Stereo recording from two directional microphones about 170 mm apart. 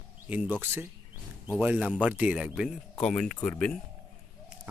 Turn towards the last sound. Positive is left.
turn(degrees=5)  # may be behind; listen again after turning